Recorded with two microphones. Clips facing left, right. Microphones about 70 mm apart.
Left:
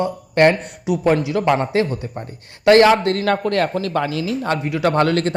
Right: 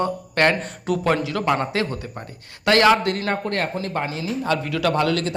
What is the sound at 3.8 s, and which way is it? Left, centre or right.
Speech, left.